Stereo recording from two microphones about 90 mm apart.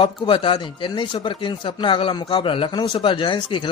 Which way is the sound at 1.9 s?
70° left (ahead or behind).